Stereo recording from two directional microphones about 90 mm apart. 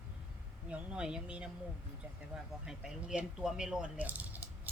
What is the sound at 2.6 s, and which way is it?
Speech, 5° right (ahead or behind).